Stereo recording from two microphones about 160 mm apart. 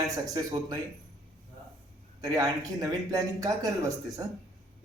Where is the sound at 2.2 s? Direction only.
20° right (ahead or behind).